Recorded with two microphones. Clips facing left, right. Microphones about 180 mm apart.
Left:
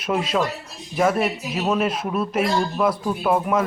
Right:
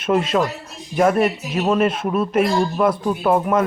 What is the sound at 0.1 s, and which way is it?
A man's voice, 10° left (ahead or behind).